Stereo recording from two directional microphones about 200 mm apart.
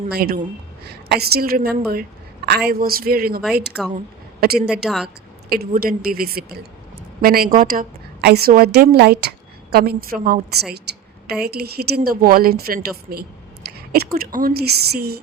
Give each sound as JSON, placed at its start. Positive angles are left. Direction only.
{"t": 0.1, "sound": "a woman's voice", "side_deg": -50}
{"t": 3.7, "sound": "a woman's voice", "side_deg": -5}
{"t": 4.4, "sound": "a woman's voice", "side_deg": -50}
{"t": 4.7, "sound": "a woman's voice", "side_deg": 0}
{"t": 5.0, "sound": "a woman's voice", "side_deg": -50}
{"t": 11.4, "sound": "a woman's voice", "side_deg": -50}